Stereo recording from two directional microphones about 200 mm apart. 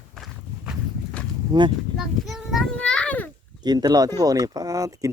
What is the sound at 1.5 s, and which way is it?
Speech, 25° right (ahead or behind).